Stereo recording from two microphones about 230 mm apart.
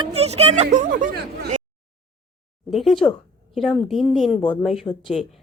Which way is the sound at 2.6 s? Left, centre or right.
Centre.